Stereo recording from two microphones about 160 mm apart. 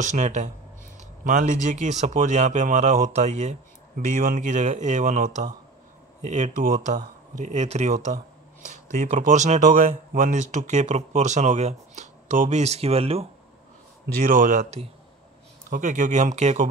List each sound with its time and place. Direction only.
0.0 s speech: 50° right (ahead or behind)
14.2 s speech: 55° right (ahead or behind)
15.7 s speech: 55° right (ahead or behind)